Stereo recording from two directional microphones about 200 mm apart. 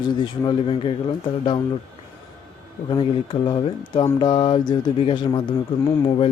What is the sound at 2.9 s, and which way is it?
Speech, 25° left (ahead or behind).